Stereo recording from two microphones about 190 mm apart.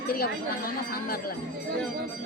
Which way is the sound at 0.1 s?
50° left (ahead or behind).